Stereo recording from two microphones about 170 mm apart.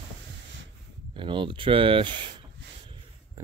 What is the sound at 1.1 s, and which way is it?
Speech, 30° right (ahead or behind).